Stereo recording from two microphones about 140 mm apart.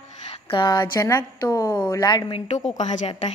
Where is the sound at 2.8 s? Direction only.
55° left (ahead or behind).